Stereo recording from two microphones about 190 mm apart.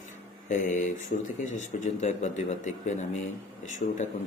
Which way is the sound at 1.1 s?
50° left (ahead or behind).